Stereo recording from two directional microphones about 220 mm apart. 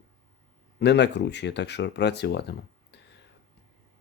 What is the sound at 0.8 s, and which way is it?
Speech, 50° left (ahead or behind).